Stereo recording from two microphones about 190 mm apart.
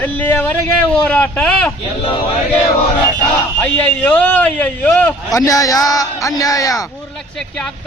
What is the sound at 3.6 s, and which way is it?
A man's voice, 5° left (ahead or behind).